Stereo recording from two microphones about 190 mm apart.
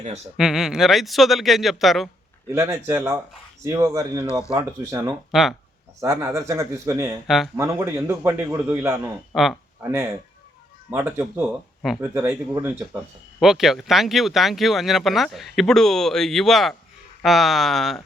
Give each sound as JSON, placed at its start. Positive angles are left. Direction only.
{"t": 0.3, "sound": "speech", "side_deg": 0}
{"t": 2.5, "sound": "a man's voice", "side_deg": -10}
{"t": 5.3, "sound": "speech", "side_deg": 0}
{"t": 6.0, "sound": "a man's voice", "side_deg": -15}
{"t": 7.3, "sound": "speech", "side_deg": 0}
{"t": 7.5, "sound": "a man's voice", "side_deg": -15}
{"t": 9.3, "sound": "speech", "side_deg": 0}
{"t": 9.8, "sound": "a man's voice", "side_deg": -15}
{"t": 13.4, "sound": "speech", "side_deg": 0}